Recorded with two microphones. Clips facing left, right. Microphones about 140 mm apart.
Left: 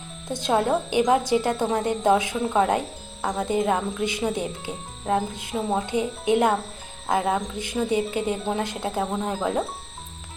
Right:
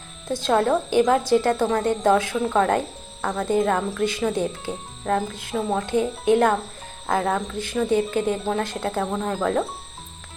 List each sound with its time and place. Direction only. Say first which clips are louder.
0.3 s speech: right 2 dB; 20° left (ahead or behind)